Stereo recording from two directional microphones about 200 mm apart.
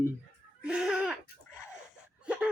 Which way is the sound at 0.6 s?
5° right (ahead or behind).